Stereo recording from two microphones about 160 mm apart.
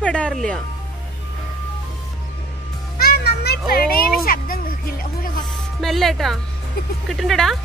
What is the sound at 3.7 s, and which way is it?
Speech, 65° left (ahead or behind).